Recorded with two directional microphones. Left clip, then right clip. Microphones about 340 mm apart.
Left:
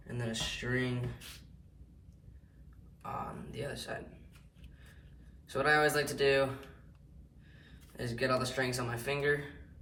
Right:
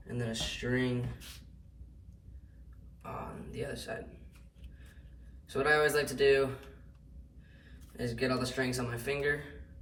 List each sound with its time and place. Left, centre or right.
0.1 s speech: centre
3.0 s speech: centre
5.5 s speech: centre
7.9 s speech: centre